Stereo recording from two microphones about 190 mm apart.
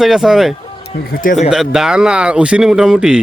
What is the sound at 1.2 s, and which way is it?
Speech, 45° left (ahead or behind).